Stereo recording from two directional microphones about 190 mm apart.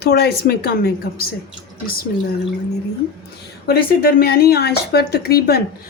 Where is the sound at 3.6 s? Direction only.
50° left (ahead or behind).